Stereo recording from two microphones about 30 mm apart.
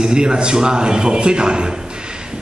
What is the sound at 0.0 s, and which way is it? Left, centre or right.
A man's voice, right.